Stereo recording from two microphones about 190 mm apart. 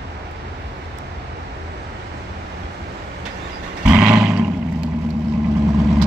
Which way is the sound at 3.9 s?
5° right (ahead or behind).